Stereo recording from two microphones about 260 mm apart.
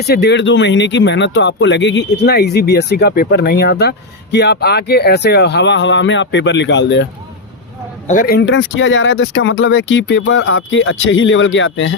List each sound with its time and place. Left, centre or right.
0.0 s speech: left
8.0 s speech: left